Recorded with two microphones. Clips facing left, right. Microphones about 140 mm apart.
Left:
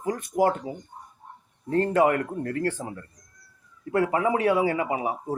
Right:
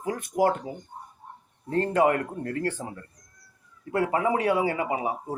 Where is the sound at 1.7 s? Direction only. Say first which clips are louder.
Left 1 dB; 30° right (ahead or behind).